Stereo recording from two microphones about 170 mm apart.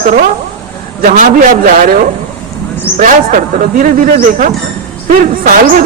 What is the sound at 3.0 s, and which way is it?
A man's voice, 50° right (ahead or behind).